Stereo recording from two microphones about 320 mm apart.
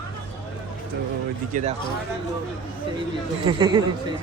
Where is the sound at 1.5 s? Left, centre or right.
Right.